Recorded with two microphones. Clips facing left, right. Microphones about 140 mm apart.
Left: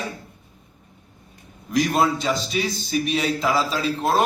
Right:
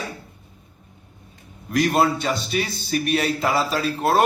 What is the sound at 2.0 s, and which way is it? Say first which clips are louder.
Speech: right 1 dB; 60° right (ahead or behind).